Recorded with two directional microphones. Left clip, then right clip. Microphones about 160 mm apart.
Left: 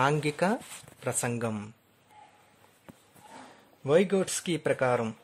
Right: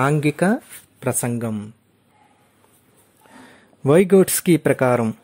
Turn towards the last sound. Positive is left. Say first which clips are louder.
# right 9 dB
turn(degrees=-35)  # may be behind; listen again after turning